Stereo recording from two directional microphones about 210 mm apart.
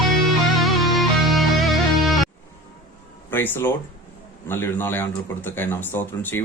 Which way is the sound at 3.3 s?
10° left (ahead or behind).